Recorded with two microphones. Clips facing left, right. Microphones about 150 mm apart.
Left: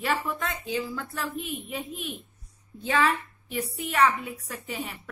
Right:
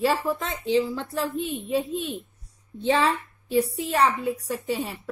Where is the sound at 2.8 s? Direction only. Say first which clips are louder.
Right 3 dB; 25° right (ahead or behind).